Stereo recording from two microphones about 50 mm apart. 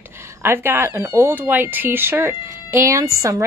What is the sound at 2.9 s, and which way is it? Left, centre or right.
Speech, right.